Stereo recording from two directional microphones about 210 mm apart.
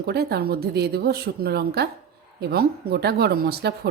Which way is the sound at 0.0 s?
50° right (ahead or behind).